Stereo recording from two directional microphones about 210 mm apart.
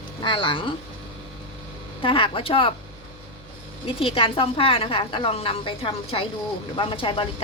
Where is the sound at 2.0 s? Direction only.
25° left (ahead or behind).